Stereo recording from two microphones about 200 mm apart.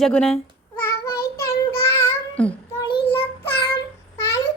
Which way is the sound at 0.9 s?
15° left (ahead or behind).